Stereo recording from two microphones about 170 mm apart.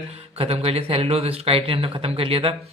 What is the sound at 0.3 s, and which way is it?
Speech, 35° right (ahead or behind).